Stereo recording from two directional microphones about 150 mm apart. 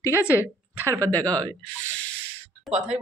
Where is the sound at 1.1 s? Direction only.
10° left (ahead or behind).